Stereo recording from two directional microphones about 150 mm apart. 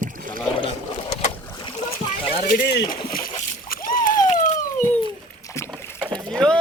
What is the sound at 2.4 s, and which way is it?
Speech, 65° left (ahead or behind).